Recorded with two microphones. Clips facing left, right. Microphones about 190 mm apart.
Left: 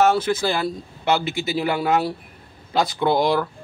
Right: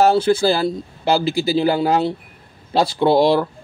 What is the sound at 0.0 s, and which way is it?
A man's voice, 30° right (ahead or behind).